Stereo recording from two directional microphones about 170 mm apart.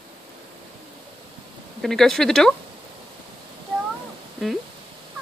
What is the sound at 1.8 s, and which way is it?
Speech, centre (ahead or behind).